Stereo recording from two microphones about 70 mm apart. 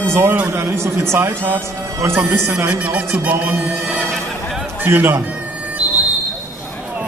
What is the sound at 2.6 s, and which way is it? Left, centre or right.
Music, right.